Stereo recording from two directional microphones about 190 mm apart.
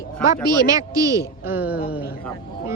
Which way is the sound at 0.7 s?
20° right (ahead or behind).